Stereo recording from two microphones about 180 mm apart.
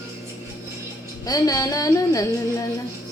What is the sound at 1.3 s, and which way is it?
Speech, 20° left (ahead or behind).